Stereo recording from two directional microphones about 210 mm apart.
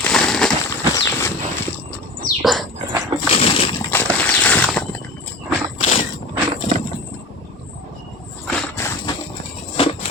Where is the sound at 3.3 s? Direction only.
25° left (ahead or behind).